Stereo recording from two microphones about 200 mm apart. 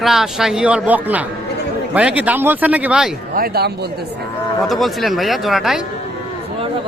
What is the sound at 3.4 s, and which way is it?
Speech, 50° right (ahead or behind).